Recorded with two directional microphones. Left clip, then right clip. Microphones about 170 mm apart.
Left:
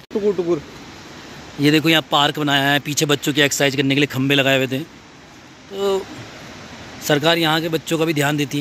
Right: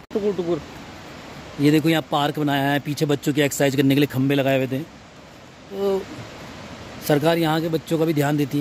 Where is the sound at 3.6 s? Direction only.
30° right (ahead or behind).